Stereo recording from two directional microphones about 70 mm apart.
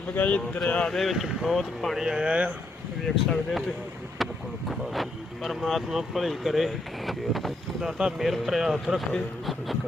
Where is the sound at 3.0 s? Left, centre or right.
Centre.